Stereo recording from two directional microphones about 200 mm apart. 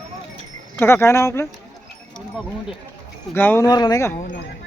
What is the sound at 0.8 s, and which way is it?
Speech, 10° left (ahead or behind).